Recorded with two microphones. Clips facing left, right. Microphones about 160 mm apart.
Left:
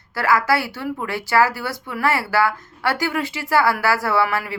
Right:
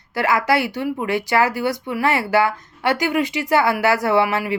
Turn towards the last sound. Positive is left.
turn(degrees=-20)  # may be behind; listen again after turning